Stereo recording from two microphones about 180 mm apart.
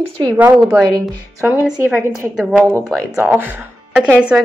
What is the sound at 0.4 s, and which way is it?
A woman's voice, 5° right (ahead or behind).